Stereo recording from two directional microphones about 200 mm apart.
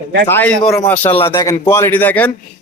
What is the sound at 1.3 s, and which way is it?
Speech, 15° left (ahead or behind).